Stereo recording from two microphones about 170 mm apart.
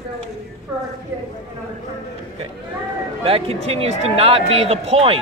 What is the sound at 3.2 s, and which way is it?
Speech, 35° right (ahead or behind).